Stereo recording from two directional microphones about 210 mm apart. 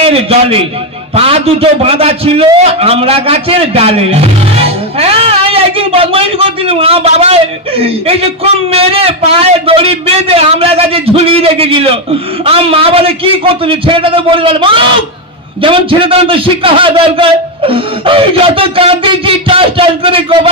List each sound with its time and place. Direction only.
0.0 s a man's voice: 25° right (ahead or behind)